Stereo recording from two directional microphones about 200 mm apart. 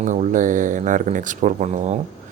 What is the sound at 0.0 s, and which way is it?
Speech, 40° right (ahead or behind).